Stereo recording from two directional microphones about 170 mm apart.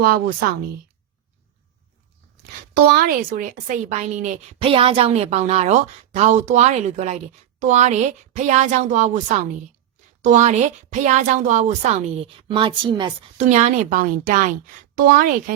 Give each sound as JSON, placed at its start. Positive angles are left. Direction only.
{"t": 0.0, "sound": "a woman's voice", "side_deg": -65}
{"t": 2.7, "sound": "a woman's voice", "side_deg": -60}
{"t": 10.2, "sound": "a woman's voice", "side_deg": -45}
{"t": 12.5, "sound": "a woman's voice", "side_deg": -30}
{"t": 13.3, "sound": "a woman's voice", "side_deg": -45}